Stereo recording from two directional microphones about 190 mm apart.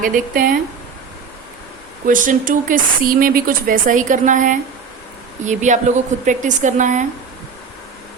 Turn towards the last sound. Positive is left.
turn(degrees=-40)  # may be behind; listen again after turning